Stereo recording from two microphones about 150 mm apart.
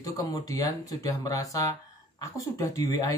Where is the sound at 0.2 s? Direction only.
25° left (ahead or behind).